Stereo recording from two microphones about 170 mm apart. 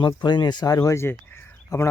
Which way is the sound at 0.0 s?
25° left (ahead or behind).